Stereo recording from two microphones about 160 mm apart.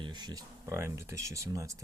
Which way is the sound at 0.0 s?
25° right (ahead or behind).